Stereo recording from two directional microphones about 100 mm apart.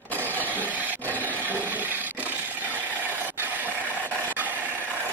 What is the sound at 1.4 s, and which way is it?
Toilet flush, 15° right (ahead or behind).